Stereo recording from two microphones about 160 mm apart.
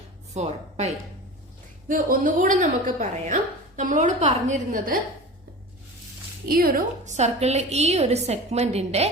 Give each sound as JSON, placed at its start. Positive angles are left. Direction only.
{"t": 1.9, "sound": "a woman's voice", "side_deg": -55}
{"t": 6.5, "sound": "a woman's voice", "side_deg": -65}